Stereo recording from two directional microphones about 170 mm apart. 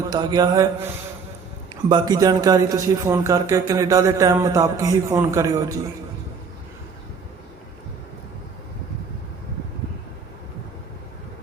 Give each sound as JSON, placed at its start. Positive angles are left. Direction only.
{"t": 0.1, "sound": "a man's voice", "side_deg": -25}
{"t": 1.9, "sound": "a man's voice", "side_deg": -20}